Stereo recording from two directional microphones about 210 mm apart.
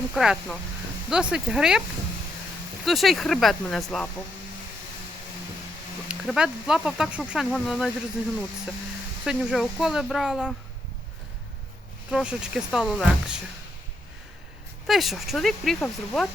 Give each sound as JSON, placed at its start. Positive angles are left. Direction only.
{"t": 0.1, "sound": "speech", "side_deg": 0}
{"t": 2.8, "sound": "speech", "side_deg": 0}
{"t": 6.1, "sound": "speech", "side_deg": -5}
{"t": 9.2, "sound": "speech", "side_deg": -5}
{"t": 12.1, "sound": "speech", "side_deg": -5}
{"t": 14.8, "sound": "speech", "side_deg": 0}